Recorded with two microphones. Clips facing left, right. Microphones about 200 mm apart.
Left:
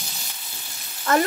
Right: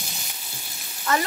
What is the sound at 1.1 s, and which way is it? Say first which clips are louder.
Speech: left 4 dB; 50° left (ahead or behind).